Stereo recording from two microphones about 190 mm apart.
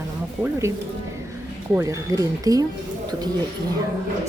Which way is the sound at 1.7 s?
15° right (ahead or behind).